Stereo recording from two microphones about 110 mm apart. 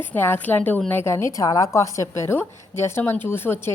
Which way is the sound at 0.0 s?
20° left (ahead or behind).